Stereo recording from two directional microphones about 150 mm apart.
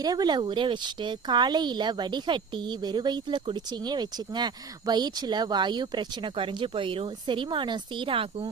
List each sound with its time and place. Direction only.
0.0 s speech: 25° right (ahead or behind)